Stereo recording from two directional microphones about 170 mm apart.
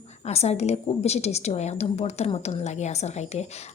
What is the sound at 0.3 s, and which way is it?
A woman's voice, 40° left (ahead or behind).